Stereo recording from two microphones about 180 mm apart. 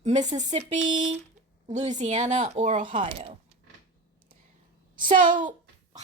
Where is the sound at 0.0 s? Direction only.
40° right (ahead or behind).